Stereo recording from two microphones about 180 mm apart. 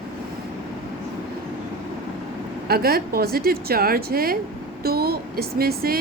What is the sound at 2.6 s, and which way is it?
A woman's voice, 60° right (ahead or behind).